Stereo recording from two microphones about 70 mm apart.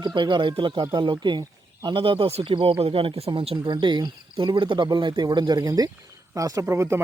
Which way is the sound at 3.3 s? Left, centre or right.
Right.